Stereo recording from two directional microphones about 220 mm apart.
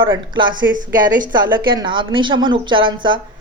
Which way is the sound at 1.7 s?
20° right (ahead or behind).